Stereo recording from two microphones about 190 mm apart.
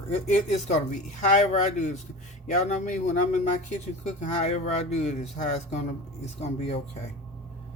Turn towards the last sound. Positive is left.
turn(degrees=35)  # may be behind; listen again after turning